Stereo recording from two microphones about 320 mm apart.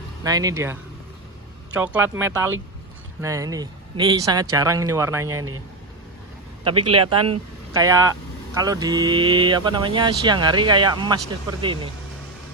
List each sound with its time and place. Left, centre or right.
0.2 s speech: centre
6.7 s speech: centre